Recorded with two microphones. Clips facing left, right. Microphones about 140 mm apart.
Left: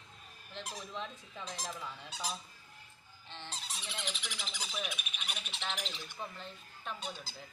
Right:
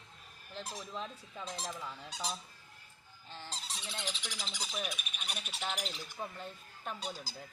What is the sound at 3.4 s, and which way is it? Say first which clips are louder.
Goose: even; 35° right (ahead or behind).